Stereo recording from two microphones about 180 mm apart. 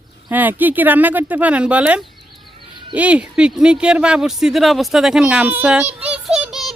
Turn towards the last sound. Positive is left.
turn(degrees=0)  # may be behind; listen again after turning